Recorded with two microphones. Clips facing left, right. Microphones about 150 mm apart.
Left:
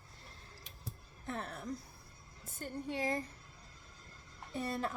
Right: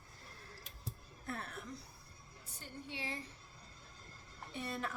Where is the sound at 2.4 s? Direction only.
50° left (ahead or behind).